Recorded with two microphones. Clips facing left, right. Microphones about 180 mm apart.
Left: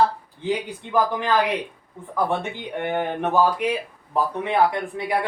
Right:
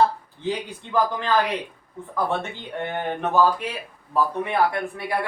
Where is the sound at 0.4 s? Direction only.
15° left (ahead or behind).